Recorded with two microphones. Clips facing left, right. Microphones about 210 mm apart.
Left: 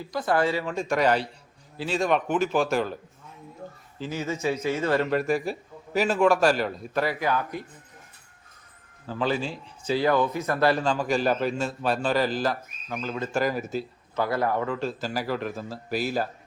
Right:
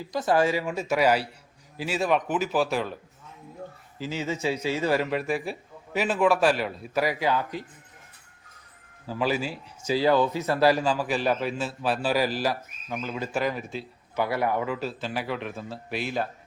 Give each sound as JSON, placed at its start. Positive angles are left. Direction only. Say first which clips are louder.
{"t": 0.1, "sound": "a man's voice", "louder": "right 1 dB", "side_deg": -20}
{"t": 4.1, "sound": "speech", "louder": "left 1 dB", "side_deg": -20}
{"t": 5.0, "sound": "a man's voice", "louder": "left 3 dB", "side_deg": 0}
{"t": 9.0, "sound": "speech", "louder": "even", "side_deg": -10}
{"t": 13.3, "sound": "a man's voice", "louder": "left 2 dB", "side_deg": 5}
{"t": 14.2, "sound": "a man's voice", "louder": "even", "side_deg": -10}